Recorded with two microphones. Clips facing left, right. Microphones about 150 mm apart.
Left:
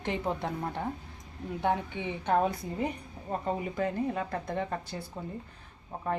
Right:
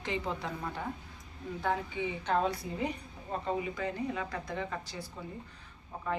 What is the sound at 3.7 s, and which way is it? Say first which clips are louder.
A woman's voice: left 4 dB; 50° left (ahead or behind).